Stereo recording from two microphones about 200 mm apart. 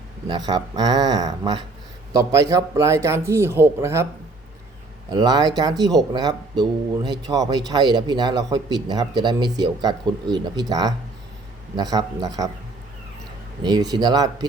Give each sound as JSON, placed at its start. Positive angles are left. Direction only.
{"t": 0.3, "sound": "a man's voice", "side_deg": -20}
{"t": 5.1, "sound": "a man's voice", "side_deg": -20}
{"t": 13.6, "sound": "a man's voice", "side_deg": -20}